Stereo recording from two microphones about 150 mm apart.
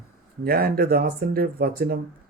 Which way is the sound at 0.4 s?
90° right.